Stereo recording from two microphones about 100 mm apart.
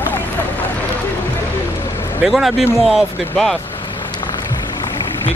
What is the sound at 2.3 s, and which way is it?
Speech, centre (ahead or behind).